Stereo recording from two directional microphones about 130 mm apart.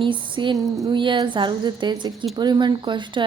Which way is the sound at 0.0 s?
40° right (ahead or behind).